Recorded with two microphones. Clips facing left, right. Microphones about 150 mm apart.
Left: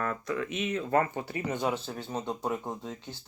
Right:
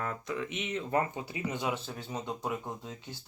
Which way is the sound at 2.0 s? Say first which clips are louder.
Left 3 dB; 35° left (ahead or behind).